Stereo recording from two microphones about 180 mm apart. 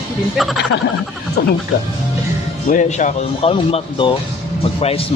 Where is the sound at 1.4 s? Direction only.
60° left (ahead or behind).